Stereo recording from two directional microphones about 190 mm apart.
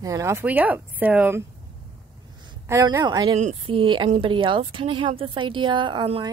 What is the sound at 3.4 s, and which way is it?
A woman's voice, 35° right (ahead or behind).